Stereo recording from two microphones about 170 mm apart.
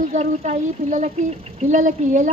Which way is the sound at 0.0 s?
45° right (ahead or behind).